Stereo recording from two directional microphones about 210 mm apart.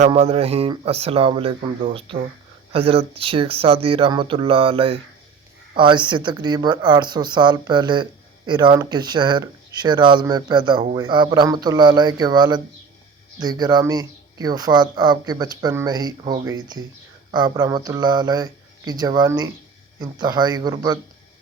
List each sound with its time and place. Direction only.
0.0 s speech: 30° right (ahead or behind)